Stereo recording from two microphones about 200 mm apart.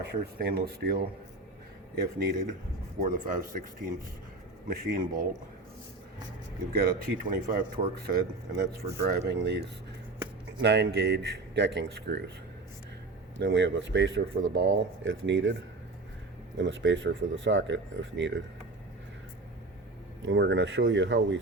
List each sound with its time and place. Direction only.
0.0 s speech: 50° right (ahead or behind)
3.0 s speech: 45° right (ahead or behind)
6.7 s speech: 50° right (ahead or behind)
13.4 s speech: 65° right (ahead or behind)
16.6 s speech: 65° right (ahead or behind)
20.2 s speech: 70° right (ahead or behind)